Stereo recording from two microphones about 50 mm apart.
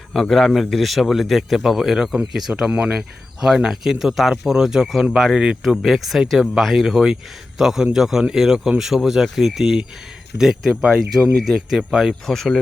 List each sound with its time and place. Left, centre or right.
0.1 s a man's voice: centre
2.6 s speech: right
2.9 s a man's voice: centre
11.8 s speech: centre
12.2 s speech: centre